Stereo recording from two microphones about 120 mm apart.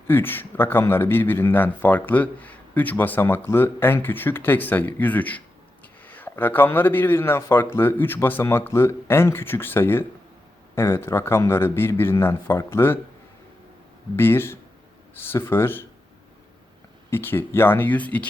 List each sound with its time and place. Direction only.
0.1 s a man's voice: 15° left (ahead or behind)
14.2 s a man's voice: 20° left (ahead or behind)
17.1 s a man's voice: 20° left (ahead or behind)